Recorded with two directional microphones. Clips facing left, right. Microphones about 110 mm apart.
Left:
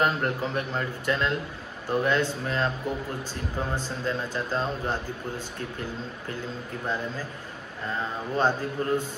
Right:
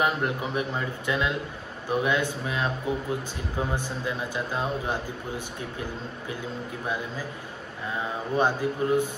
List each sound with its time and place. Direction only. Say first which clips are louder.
0.0 s a man's voice: even; 15° right (ahead or behind)
7.9 s a man's voice: right 1 dB; 15° right (ahead or behind)